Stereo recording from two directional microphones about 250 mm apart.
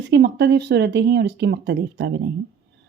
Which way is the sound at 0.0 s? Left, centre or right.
Right.